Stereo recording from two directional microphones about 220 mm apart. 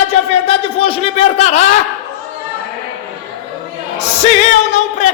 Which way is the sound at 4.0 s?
30° left (ahead or behind).